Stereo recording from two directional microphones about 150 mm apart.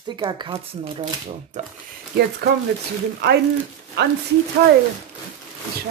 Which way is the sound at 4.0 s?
90° right.